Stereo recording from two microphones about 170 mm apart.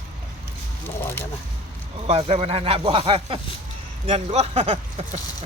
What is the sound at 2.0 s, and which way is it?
Speech, 40° right (ahead or behind).